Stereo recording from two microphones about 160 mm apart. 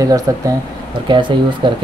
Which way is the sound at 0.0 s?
20° right (ahead or behind).